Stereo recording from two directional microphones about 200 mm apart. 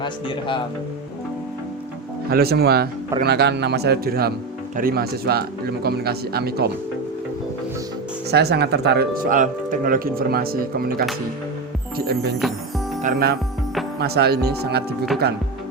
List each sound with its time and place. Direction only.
0.0 s speech: 25° left (ahead or behind)
2.3 s a man's voice: 50° right (ahead or behind)
8.3 s speech: 55° right (ahead or behind)